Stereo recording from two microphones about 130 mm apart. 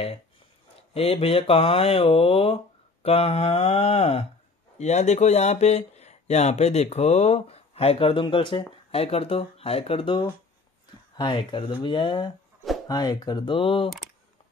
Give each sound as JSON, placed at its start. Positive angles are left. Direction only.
{"t": 0.9, "sound": "speech", "side_deg": 50}
{"t": 4.7, "sound": "speech", "side_deg": 60}